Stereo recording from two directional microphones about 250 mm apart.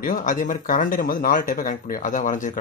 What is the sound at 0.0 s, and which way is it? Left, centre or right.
Speech, left.